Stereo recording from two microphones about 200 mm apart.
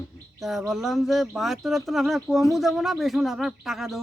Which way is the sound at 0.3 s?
Centre (ahead or behind).